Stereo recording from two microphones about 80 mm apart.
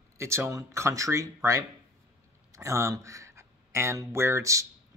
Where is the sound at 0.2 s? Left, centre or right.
Right.